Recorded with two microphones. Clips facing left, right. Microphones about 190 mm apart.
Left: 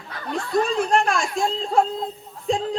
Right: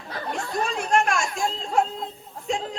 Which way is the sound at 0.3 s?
35° left (ahead or behind).